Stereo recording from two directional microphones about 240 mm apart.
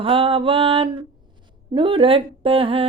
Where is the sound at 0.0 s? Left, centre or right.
Right.